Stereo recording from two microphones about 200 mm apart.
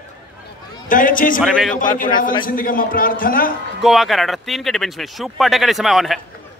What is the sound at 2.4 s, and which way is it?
A man's voice, 45° left (ahead or behind).